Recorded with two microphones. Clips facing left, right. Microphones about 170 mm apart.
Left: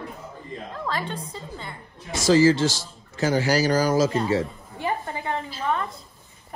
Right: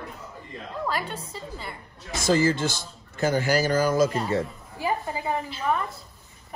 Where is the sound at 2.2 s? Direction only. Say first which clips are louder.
Left 5 dB; 55° right (ahead or behind).